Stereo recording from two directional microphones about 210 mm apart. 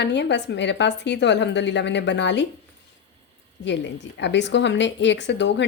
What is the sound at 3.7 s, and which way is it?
Speech, 55° left (ahead or behind).